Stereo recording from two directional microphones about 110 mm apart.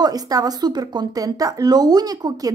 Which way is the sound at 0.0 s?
35° right (ahead or behind).